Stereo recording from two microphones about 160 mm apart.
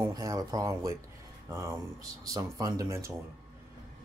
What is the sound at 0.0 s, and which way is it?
Speech, 20° right (ahead or behind).